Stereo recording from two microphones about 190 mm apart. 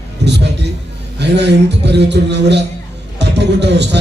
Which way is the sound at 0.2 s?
65° right (ahead or behind).